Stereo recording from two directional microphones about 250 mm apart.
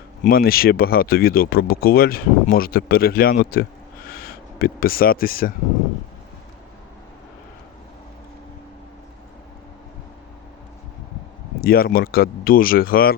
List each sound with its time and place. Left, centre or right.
0.3 s speech: left
11.6 s speech: left